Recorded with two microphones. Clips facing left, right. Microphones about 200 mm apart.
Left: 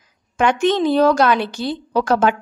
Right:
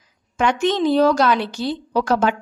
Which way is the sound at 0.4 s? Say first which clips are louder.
Left 2 dB; 55° left (ahead or behind).